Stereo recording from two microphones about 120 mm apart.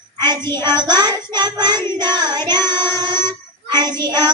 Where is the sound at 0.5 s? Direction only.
35° right (ahead or behind).